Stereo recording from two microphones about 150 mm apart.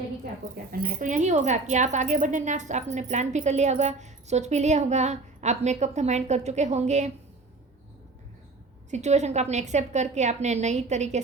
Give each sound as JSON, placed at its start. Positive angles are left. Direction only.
{"t": 0.5, "sound": "speech", "side_deg": -80}
{"t": 8.9, "sound": "speech", "side_deg": -50}